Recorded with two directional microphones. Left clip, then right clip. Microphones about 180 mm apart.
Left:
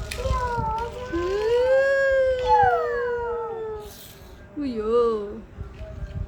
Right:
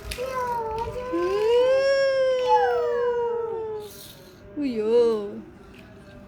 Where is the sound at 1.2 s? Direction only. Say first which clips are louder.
Right 1 dB; 5° right (ahead or behind).